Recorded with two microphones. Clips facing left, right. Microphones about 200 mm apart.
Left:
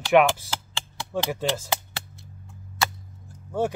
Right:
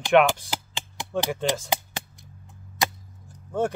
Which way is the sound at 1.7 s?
15° right (ahead or behind).